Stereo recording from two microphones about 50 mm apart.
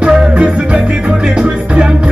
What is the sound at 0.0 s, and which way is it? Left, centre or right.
Music, centre.